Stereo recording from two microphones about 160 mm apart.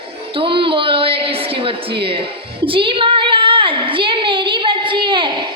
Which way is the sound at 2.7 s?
35° right (ahead or behind).